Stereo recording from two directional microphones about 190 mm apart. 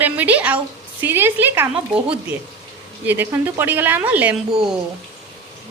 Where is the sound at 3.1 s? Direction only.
10° right (ahead or behind).